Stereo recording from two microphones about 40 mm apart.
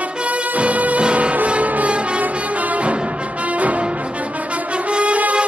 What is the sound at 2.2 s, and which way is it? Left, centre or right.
Music, right.